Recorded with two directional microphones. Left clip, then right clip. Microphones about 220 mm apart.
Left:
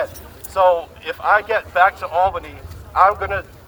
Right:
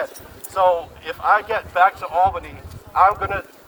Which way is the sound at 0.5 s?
25° left (ahead or behind).